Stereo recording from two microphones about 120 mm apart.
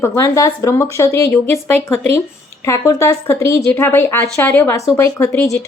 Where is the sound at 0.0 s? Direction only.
25° left (ahead or behind).